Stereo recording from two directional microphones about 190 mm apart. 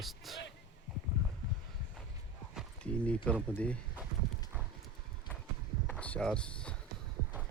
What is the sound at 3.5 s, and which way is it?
Speech, 5° left (ahead or behind).